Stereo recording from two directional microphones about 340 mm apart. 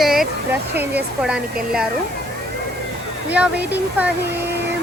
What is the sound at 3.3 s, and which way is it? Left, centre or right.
Speech, centre.